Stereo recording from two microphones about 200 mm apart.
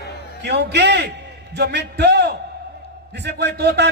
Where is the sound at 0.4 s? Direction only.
55° right (ahead or behind).